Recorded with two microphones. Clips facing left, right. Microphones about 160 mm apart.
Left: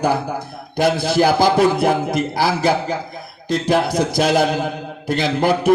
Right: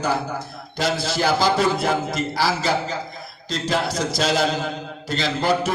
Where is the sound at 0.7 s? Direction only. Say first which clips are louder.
Left 7 dB; 55° left (ahead or behind).